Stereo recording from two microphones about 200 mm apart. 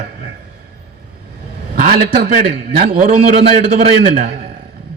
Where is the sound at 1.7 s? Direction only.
45° right (ahead or behind).